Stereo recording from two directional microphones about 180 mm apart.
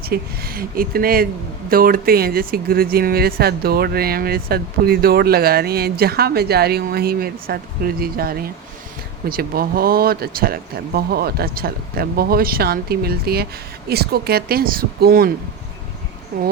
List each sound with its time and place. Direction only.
0.0 s speech: 55° right (ahead or behind)
16.3 s speech: 50° right (ahead or behind)